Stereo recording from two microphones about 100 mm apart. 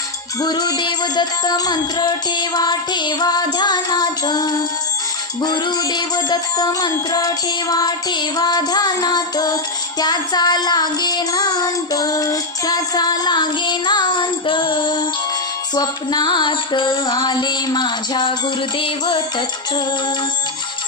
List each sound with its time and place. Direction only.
0.4 s music: 40° left (ahead or behind)